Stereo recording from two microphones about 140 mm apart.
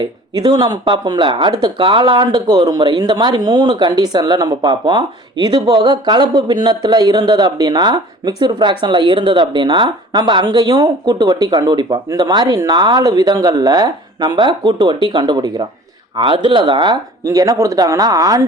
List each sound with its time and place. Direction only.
0.0 s speech: 30° right (ahead or behind)